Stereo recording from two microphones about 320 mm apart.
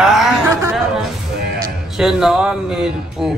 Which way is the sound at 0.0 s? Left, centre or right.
Centre.